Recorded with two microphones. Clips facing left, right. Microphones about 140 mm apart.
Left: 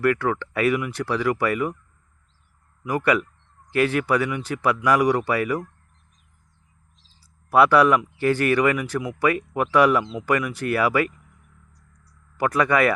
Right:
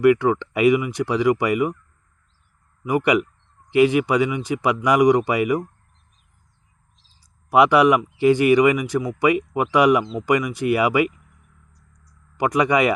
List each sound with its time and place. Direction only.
0.0 s speech: 15° right (ahead or behind)
2.8 s speech: 15° right (ahead or behind)
7.5 s speech: 15° right (ahead or behind)
11.9 s a sound: 15° right (ahead or behind)